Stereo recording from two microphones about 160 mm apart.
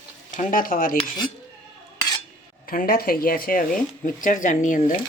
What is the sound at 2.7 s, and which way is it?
Speech, 65° left (ahead or behind).